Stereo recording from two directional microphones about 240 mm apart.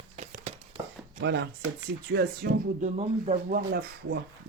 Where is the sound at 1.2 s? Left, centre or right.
Right.